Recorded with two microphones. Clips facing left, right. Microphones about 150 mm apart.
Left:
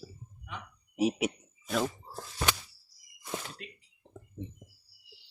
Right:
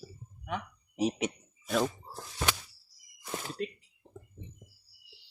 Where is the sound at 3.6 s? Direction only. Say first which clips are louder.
Right 13 dB; 40° right (ahead or behind).